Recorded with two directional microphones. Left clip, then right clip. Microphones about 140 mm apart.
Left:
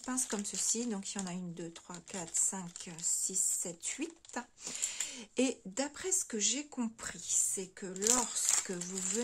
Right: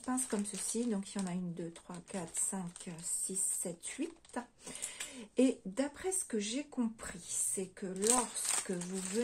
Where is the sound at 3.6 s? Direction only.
35° left (ahead or behind).